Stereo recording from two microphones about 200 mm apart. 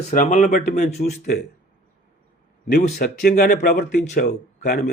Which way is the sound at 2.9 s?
50° left (ahead or behind).